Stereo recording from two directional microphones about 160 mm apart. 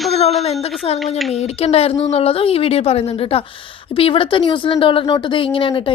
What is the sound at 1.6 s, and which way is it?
Speech, 40° left (ahead or behind).